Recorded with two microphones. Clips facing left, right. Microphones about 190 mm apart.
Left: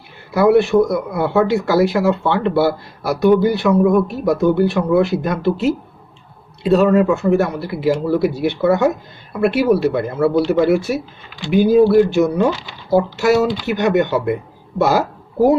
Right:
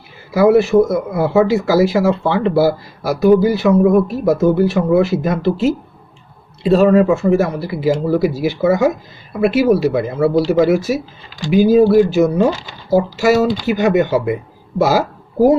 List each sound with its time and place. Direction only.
0.3 s speech: centre (ahead or behind)
12.5 s speech: 40° right (ahead or behind)
13.1 s speech: centre (ahead or behind)